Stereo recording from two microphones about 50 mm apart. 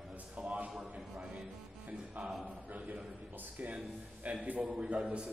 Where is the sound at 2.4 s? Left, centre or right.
Right.